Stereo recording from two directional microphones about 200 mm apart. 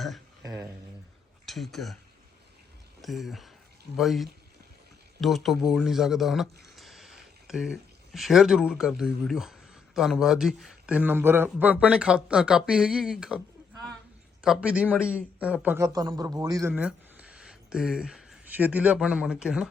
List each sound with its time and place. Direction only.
0.4 s speech: 15° right (ahead or behind)
1.5 s speech: centre (ahead or behind)
3.0 s speech: centre (ahead or behind)
14.4 s speech: 5° right (ahead or behind)